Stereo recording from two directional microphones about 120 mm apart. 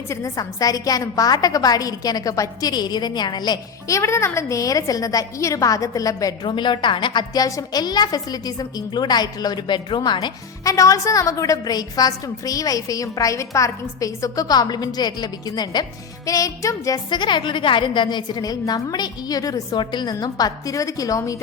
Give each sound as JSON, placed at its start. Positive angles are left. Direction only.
{"t": 0.1, "sound": "a woman's voice", "side_deg": 30}